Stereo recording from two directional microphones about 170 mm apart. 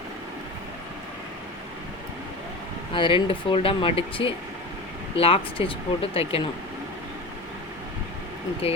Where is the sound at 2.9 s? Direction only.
30° left (ahead or behind).